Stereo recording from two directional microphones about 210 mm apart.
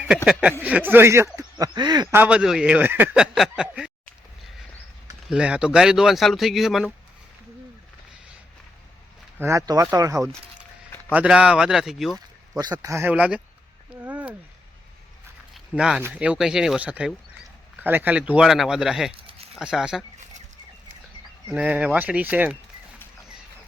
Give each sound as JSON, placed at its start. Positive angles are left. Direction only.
{"t": 0.3, "sound": "speech", "side_deg": 0}
{"t": 5.3, "sound": "speech", "side_deg": -5}
{"t": 9.4, "sound": "speech", "side_deg": -15}
{"t": 12.5, "sound": "speech", "side_deg": -20}
{"t": 15.5, "sound": "speech", "side_deg": -5}
{"t": 19.1, "sound": "a sound", "side_deg": -25}
{"t": 19.5, "sound": "speech", "side_deg": -5}
{"t": 21.5, "sound": "speech", "side_deg": -5}